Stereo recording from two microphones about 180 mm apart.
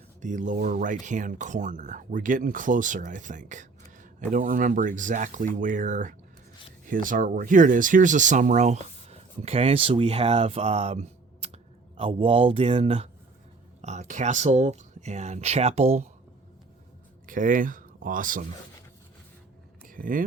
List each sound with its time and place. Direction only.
0.2 s speech: 45° right (ahead or behind)
17.2 s speech: 50° right (ahead or behind)
19.8 s vehicle: 50° right (ahead or behind)